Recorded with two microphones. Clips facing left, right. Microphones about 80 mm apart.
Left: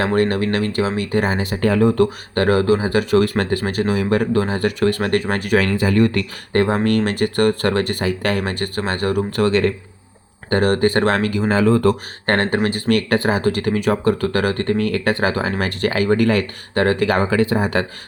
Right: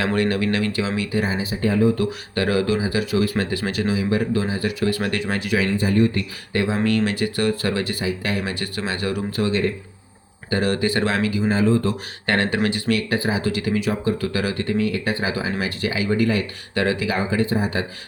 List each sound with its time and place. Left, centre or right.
0.0 s speech: left
1.2 s speech: left
2.0 s speech: left
6.5 s speech: left
9.4 s speech: left
10.5 s speech: left
12.2 s speech: left
13.4 s speech: left
13.9 s speech: left
14.2 s speech: left
16.7 s speech: left